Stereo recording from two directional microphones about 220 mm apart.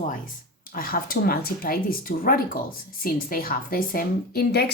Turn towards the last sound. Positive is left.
turn(degrees=45)  # may be behind; listen again after turning